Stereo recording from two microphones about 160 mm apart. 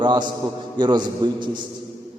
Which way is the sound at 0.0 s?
30° right (ahead or behind).